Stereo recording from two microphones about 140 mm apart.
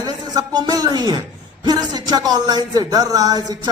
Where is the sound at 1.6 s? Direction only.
30° right (ahead or behind).